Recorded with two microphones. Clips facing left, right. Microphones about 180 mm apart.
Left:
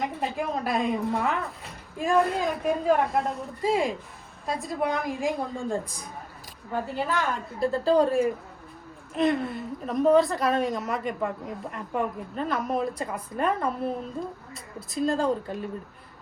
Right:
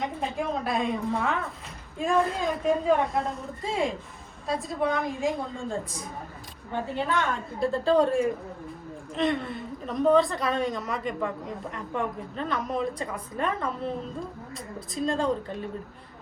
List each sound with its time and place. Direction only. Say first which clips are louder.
0.0 s a woman's voice: left 1 dB; centre (ahead or behind)